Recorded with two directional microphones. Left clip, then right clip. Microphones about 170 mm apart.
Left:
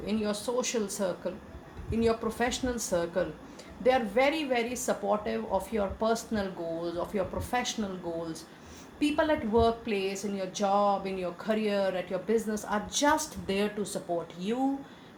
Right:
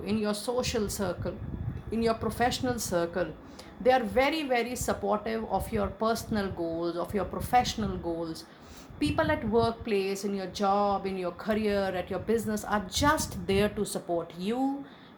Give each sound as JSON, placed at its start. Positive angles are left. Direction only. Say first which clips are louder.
{"t": 0.0, "sound": "speech", "louder": "right 1 dB", "side_deg": -50}